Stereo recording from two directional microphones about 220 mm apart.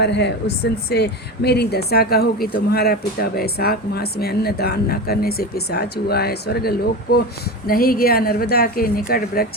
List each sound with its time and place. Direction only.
0.0 s speech: 50° left (ahead or behind)